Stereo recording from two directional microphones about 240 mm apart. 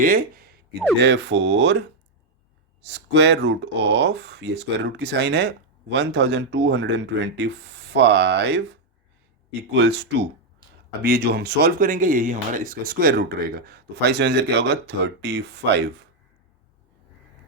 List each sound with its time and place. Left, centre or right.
0.0 s a sound: right
1.0 s speech: right
2.8 s speech: right
9.7 s speech: right